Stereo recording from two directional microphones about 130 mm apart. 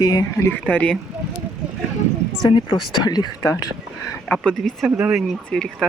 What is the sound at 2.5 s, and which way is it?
Speech, 40° left (ahead or behind).